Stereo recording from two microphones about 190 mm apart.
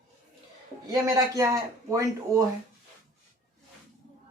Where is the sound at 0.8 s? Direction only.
15° right (ahead or behind).